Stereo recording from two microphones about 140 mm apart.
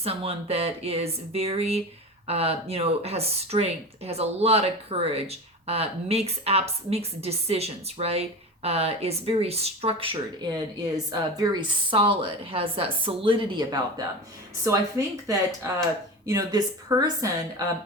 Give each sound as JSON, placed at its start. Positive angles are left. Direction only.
{"t": 0.0, "sound": "speech", "side_deg": -45}
{"t": 11.1, "sound": "a woman's voice", "side_deg": -30}